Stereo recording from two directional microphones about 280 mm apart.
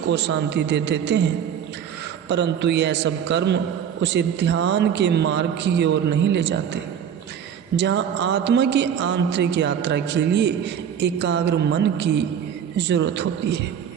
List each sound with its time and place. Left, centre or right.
0.1 s a man's voice: right
2.3 s a man's voice: right
7.8 s a man's voice: right